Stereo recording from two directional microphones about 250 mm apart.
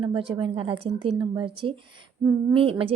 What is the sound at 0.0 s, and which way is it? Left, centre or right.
A woman's voice, right.